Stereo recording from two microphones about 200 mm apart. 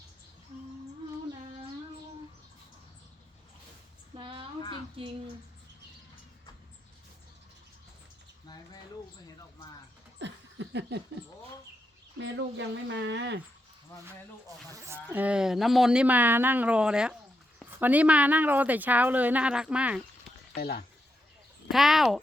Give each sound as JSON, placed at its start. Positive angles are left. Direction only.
{"t": 4.1, "sound": "a sound", "side_deg": -25}
{"t": 10.2, "sound": "laughter", "side_deg": -65}
{"t": 12.2, "sound": "speech", "side_deg": -65}
{"t": 14.7, "sound": "a woman's voice", "side_deg": -15}
{"t": 20.6, "sound": "speech", "side_deg": 50}
{"t": 21.7, "sound": "speech", "side_deg": 0}